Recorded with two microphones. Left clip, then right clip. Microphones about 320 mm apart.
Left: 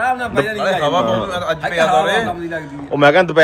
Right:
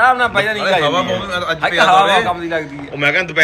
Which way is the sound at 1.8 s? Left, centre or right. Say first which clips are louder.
Right 4 dB; centre.